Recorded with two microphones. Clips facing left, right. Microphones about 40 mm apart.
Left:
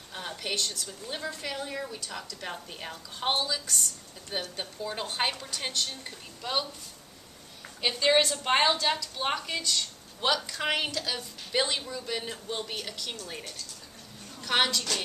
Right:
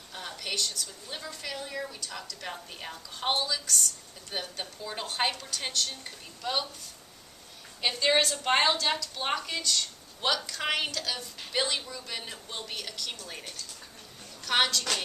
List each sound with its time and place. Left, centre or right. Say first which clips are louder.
0.1 s a sound: left 2 dB; centre
0.5 s a woman's voice: even; left
0.9 s a woman's voice: left 4 dB; centre
7.8 s a woman's voice: left 1 dB; centre